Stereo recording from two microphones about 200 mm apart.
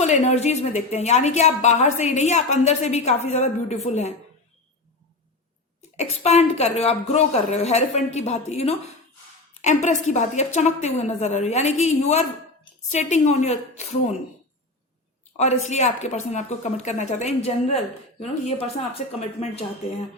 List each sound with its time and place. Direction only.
0.0 s a woman's voice: 35° left (ahead or behind)
6.0 s a woman's voice: 35° left (ahead or behind)
15.4 s a woman's voice: 35° left (ahead or behind)